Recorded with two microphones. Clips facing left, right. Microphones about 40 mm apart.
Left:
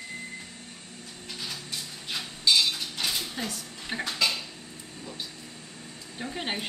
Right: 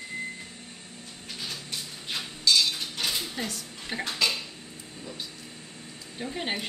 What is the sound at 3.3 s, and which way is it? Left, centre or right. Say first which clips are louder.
Speech: even; centre.